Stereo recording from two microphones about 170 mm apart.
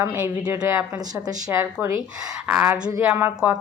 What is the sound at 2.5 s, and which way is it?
Speech, 5° right (ahead or behind).